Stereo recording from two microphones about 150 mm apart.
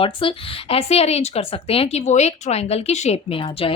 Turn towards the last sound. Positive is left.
turn(degrees=40)  # may be behind; listen again after turning